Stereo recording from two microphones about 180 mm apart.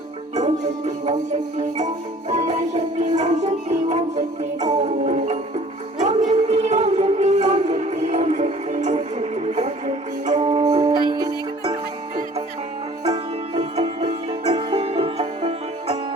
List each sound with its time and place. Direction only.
2.3 s music: 40° right (ahead or behind)
13.1 s music: 35° right (ahead or behind)